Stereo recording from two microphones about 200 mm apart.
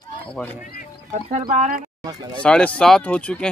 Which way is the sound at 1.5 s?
40° right (ahead or behind).